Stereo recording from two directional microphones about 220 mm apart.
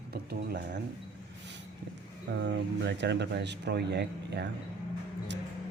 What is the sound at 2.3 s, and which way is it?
Speech, 55° right (ahead or behind).